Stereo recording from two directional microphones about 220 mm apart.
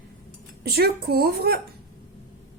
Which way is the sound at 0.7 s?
45° right (ahead or behind).